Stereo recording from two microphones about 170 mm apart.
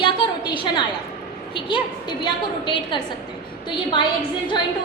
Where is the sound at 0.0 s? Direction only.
30° left (ahead or behind).